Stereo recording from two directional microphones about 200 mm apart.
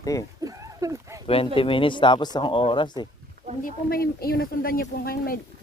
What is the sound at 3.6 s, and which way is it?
Speech, 50° left (ahead or behind).